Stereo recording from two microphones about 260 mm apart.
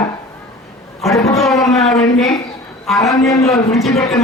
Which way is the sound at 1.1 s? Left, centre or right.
Centre.